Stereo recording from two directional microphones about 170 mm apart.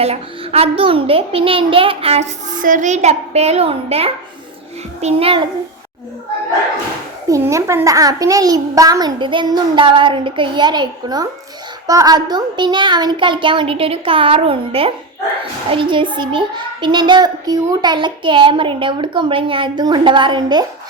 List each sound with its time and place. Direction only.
0.0 s a child's voice: 35° right (ahead or behind)
2.5 s a child's voice: 50° right (ahead or behind); by 5.5 s 30° right (ahead or behind)
7.3 s a child's voice: 20° right (ahead or behind)